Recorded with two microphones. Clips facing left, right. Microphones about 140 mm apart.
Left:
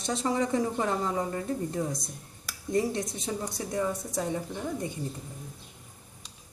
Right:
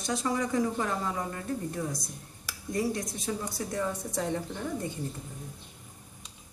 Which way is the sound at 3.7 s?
10° left (ahead or behind).